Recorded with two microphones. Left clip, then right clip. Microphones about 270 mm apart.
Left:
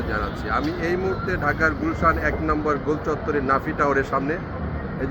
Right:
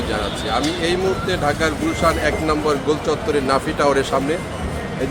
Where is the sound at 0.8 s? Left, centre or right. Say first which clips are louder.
Right 5 dB; right.